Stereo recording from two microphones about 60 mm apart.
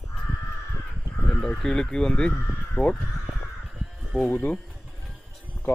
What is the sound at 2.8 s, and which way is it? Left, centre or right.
Speech, left.